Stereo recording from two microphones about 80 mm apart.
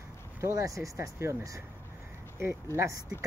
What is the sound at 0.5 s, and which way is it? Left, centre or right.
Speech, right.